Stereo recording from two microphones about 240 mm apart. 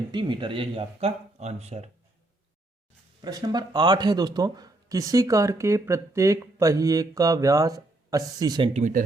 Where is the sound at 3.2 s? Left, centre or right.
Centre.